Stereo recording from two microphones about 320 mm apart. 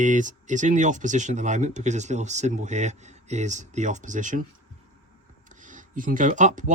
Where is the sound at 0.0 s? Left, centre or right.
Right.